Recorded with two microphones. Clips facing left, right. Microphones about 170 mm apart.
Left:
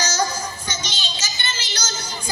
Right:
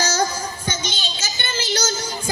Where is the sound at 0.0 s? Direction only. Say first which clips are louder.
Right 2 dB; 55° right (ahead or behind).